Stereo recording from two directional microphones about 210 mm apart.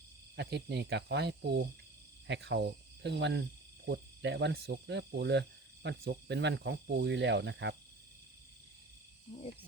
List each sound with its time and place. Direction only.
0.3 s speech: 55° right (ahead or behind)
2.2 s cricket: 55° right (ahead or behind)
3.8 s speech: 55° right (ahead or behind)